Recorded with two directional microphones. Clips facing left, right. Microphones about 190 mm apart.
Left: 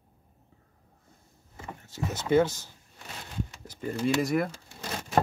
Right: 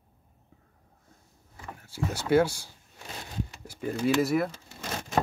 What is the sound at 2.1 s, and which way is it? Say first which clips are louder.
Speech: even; 10° right (ahead or behind).